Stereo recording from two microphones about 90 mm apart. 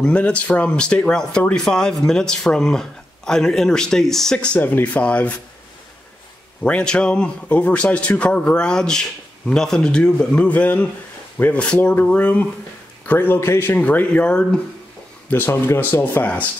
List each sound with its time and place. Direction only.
0.0 s speech: 15° left (ahead or behind)
4.6 s speech: 20° left (ahead or behind)
6.6 s speech: 10° left (ahead or behind)
15.2 s speech: 25° left (ahead or behind)